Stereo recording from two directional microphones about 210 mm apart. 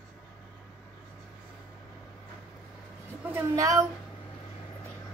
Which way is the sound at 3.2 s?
10° right (ahead or behind).